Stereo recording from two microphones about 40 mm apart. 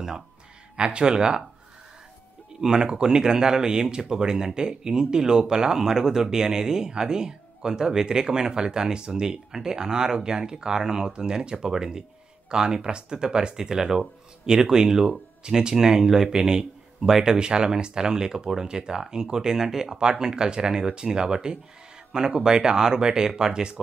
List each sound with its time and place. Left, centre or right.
0.7 s speech: right
2.6 s speech: centre